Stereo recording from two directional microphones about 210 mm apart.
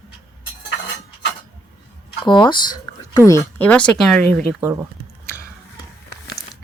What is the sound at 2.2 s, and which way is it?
Speech, 20° left (ahead or behind).